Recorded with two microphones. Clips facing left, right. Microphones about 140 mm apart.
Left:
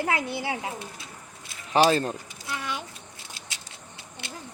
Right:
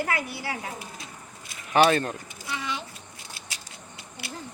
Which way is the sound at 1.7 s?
30° left (ahead or behind).